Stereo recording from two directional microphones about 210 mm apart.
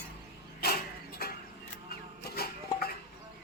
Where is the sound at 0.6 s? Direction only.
45° left (ahead or behind).